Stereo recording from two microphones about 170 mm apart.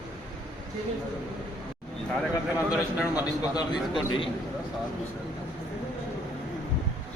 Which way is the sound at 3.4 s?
25° left (ahead or behind).